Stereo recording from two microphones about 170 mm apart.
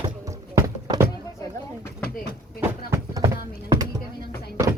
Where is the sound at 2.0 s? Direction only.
65° left (ahead or behind).